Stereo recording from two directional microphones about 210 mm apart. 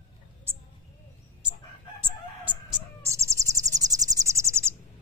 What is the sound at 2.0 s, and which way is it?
Chicken, 10° right (ahead or behind).